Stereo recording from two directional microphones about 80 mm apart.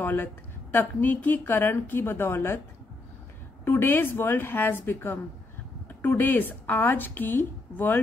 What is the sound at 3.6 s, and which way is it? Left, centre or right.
Speech, left.